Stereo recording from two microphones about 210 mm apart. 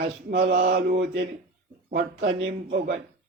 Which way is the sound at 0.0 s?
45° right (ahead or behind).